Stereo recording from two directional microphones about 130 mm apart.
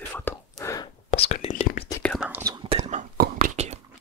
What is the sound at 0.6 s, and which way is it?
Whispering, 25° left (ahead or behind).